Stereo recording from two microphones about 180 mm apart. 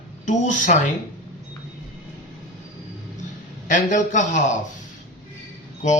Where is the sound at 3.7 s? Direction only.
45° left (ahead or behind).